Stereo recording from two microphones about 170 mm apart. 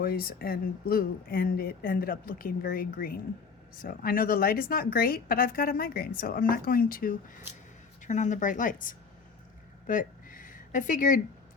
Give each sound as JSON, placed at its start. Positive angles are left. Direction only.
{"t": 0.0, "sound": "speech", "side_deg": 60}
{"t": 8.0, "sound": "speech", "side_deg": 45}
{"t": 9.8, "sound": "a sound", "side_deg": 55}